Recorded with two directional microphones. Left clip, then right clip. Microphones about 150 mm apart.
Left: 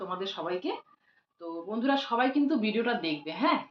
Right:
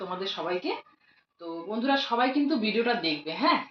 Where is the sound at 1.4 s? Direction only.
5° left (ahead or behind).